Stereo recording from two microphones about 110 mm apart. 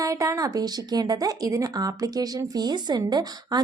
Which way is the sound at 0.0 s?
30° right (ahead or behind).